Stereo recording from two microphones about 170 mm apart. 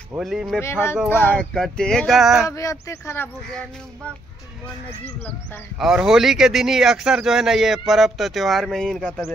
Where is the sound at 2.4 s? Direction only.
20° left (ahead or behind).